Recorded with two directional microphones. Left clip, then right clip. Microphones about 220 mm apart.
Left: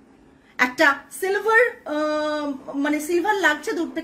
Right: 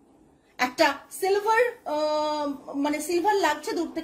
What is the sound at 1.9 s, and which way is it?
A woman's voice, 20° left (ahead or behind).